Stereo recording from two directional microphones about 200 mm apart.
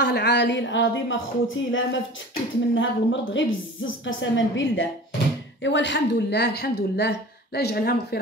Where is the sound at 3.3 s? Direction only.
70° left (ahead or behind).